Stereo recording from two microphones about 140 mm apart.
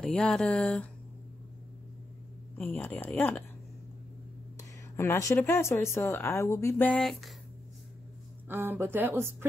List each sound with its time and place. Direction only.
0.0 s speech: 5° left (ahead or behind)
2.5 s speech: 15° left (ahead or behind)
4.9 s speech: 20° left (ahead or behind); by 7.3 s centre (ahead or behind)
8.5 s speech: 15° right (ahead or behind)